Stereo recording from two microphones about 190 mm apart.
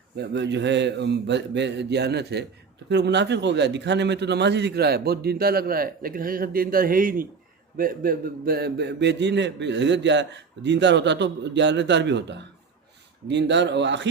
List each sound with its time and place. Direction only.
0.2 s a man's voice: 65° right (ahead or behind)